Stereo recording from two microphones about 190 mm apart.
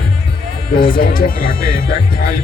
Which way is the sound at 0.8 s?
50° left (ahead or behind).